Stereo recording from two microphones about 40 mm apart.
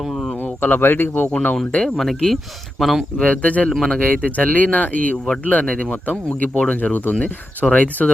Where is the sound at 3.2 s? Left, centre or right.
Left.